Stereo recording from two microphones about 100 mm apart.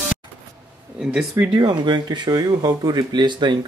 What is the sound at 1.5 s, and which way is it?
Speech, 50° right (ahead or behind).